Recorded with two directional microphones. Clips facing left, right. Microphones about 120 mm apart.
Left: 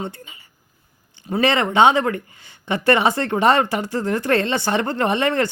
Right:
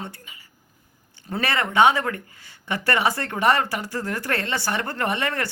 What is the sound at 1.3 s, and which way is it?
Speech, 20° left (ahead or behind).